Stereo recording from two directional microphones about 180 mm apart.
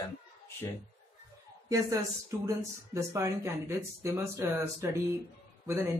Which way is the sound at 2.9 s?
15° right (ahead or behind).